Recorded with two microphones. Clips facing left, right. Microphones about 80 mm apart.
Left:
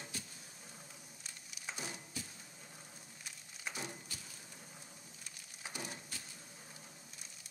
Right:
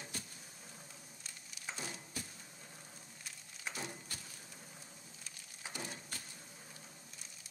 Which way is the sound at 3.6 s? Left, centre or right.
Centre.